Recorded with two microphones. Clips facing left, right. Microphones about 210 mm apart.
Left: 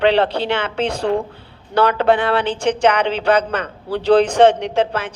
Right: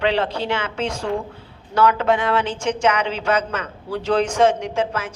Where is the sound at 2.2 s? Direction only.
35° left (ahead or behind).